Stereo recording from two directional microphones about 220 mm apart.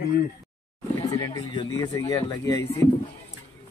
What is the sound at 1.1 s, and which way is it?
Speech, 20° left (ahead or behind).